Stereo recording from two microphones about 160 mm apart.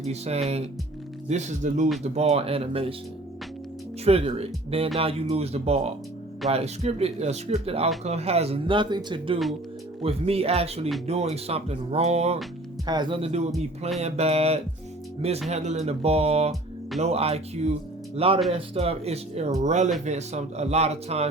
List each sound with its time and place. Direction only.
0.0 s speech: 40° right (ahead or behind)
4.0 s speech: 40° right (ahead or behind)
12.8 s speech: 25° right (ahead or behind)